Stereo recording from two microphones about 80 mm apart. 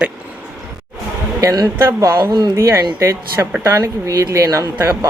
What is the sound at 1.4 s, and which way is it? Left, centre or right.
Speech, right.